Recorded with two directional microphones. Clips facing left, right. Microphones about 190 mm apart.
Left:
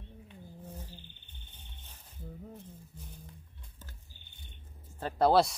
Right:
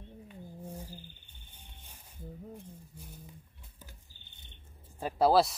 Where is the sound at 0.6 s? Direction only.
10° right (ahead or behind).